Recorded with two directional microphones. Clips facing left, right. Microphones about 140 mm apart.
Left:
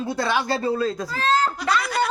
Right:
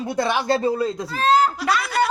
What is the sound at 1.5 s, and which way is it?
Snicker, centre (ahead or behind).